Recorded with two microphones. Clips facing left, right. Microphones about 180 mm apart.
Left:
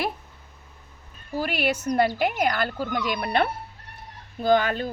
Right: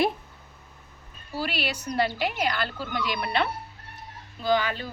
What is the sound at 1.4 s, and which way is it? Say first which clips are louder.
Speech: left 5 dB; 50° left (ahead or behind).